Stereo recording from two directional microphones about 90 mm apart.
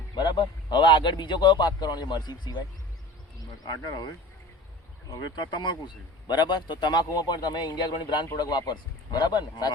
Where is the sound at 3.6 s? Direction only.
50° left (ahead or behind).